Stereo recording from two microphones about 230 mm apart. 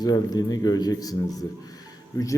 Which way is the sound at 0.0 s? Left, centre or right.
Centre.